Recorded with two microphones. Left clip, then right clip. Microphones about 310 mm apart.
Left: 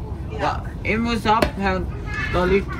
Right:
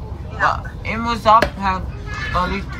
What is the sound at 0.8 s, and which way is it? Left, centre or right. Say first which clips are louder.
Speech: left 1 dB; right.